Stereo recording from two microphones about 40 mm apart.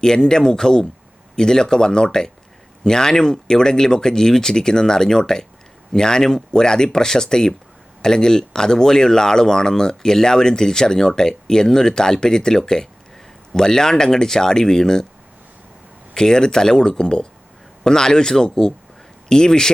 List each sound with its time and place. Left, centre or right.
0.0 s speech: centre
16.1 s speech: centre